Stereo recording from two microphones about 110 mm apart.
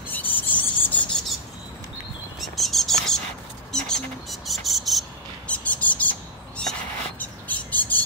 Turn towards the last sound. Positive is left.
turn(degrees=15)  # may be behind; listen again after turning